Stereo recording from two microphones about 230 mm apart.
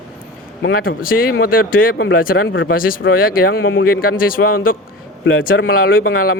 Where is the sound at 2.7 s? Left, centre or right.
Left.